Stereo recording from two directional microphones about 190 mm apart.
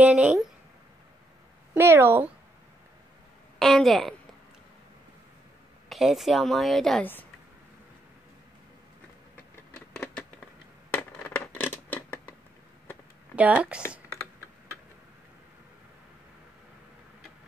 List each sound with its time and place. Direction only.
0.0 s a sound: 5° right (ahead or behind)
1.7 s speech: 10° right (ahead or behind)
3.5 s a woman's voice: centre (ahead or behind)
5.9 s a woman's voice: centre (ahead or behind)
10.9 s scissors: 10° left (ahead or behind)
13.4 s speech: 5° right (ahead or behind)